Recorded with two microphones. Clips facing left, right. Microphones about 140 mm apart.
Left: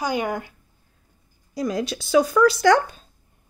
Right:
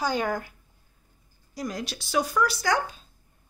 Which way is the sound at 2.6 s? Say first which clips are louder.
Left 9 dB; 75° left (ahead or behind).